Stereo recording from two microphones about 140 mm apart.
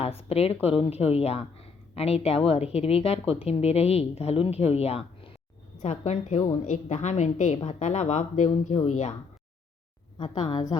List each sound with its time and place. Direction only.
0.0 s a woman's voice: 45° left (ahead or behind)
10.2 s a woman's voice: 45° left (ahead or behind)